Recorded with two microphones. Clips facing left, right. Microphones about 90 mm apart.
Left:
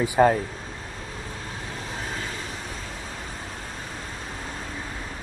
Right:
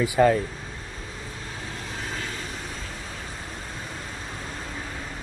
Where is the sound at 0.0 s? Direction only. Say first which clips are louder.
Left 1 dB; 35° left (ahead or behind).